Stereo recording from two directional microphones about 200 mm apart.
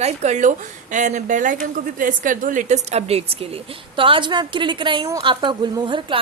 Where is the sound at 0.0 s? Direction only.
35° right (ahead or behind).